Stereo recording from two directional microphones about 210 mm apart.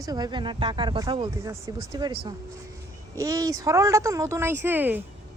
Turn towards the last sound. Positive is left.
turn(degrees=-10)  # may be behind; listen again after turning